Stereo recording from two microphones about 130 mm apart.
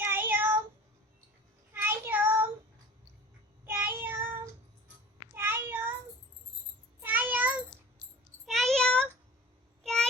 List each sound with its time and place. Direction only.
0.0 s child singing: 15° right (ahead or behind)
1.7 s child singing: 15° right (ahead or behind)
3.7 s child singing: 15° right (ahead or behind)
7.0 s a sound: 15° right (ahead or behind)
8.4 s a sound: centre (ahead or behind)
9.8 s child singing: 5° left (ahead or behind)